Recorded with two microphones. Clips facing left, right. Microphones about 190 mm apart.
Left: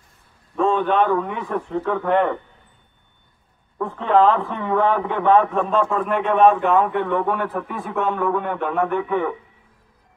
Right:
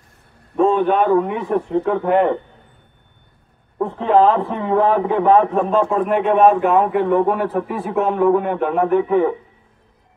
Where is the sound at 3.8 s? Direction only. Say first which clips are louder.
Right 3 dB; 30° right (ahead or behind).